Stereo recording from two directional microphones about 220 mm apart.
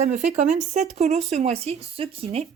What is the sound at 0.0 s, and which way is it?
Speech, 30° right (ahead or behind).